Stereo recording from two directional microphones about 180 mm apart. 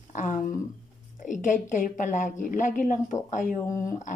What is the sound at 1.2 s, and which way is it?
Speech, 45° left (ahead or behind).